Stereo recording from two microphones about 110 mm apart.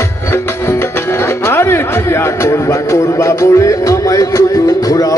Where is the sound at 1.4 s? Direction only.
20° left (ahead or behind).